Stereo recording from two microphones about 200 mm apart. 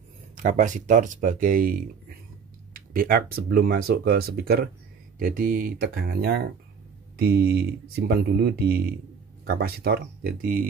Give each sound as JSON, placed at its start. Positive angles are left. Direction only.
{"t": 0.4, "sound": "speech", "side_deg": -35}